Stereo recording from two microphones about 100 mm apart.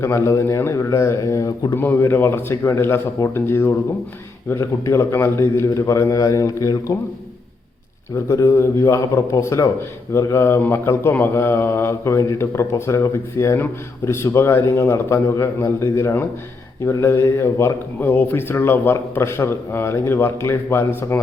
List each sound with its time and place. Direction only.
0.0 s mantra: 30° left (ahead or behind)
1.8 s mantra: 20° left (ahead or behind)
8.1 s a man's voice: 30° left (ahead or behind)
10.1 s mantra: 30° left (ahead or behind)